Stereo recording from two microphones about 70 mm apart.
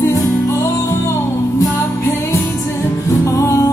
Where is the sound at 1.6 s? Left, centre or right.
Left.